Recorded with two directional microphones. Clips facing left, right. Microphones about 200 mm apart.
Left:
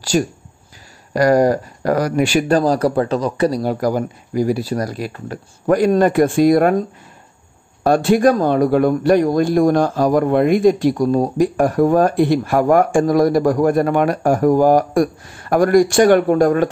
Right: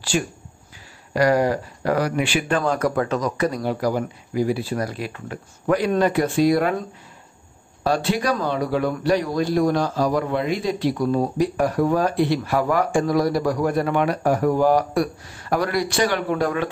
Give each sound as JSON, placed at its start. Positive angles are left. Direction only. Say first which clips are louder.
{"t": 0.1, "sound": "speech", "louder": "left 6 dB", "side_deg": 40}
{"t": 7.8, "sound": "speech", "louder": "left 9 dB", "side_deg": 50}